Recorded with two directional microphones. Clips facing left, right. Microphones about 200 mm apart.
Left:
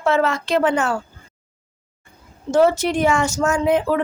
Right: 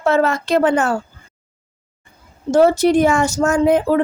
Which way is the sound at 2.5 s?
35° right (ahead or behind).